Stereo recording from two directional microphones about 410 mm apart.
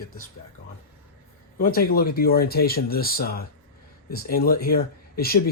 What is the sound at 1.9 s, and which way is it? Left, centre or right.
Speech, left.